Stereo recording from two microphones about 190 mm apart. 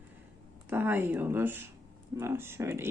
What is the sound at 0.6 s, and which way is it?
Speech, 10° right (ahead or behind).